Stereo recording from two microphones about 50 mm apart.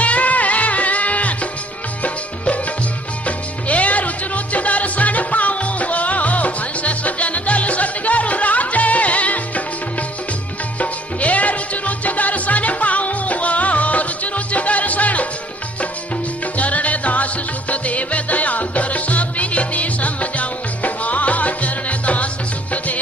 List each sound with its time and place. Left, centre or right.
0.0 s music: left
10.8 s music: left
16.5 s music: left